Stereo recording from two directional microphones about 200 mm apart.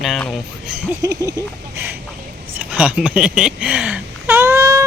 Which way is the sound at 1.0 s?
15° right (ahead or behind).